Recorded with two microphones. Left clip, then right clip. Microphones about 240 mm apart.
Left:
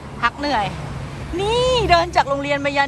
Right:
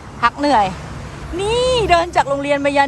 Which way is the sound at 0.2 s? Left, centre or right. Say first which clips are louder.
Right 6 dB; centre.